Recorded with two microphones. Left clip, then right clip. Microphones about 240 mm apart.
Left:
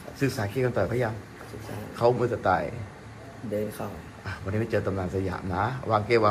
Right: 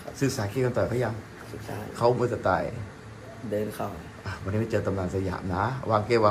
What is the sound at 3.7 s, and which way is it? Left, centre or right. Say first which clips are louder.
Speech: right 3 dB; centre.